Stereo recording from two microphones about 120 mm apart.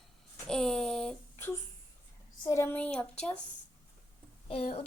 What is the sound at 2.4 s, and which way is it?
Speech, 25° left (ahead or behind).